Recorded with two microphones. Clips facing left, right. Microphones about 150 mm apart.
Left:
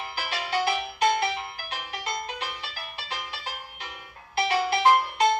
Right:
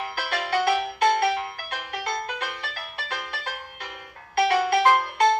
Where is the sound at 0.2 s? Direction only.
55° right (ahead or behind).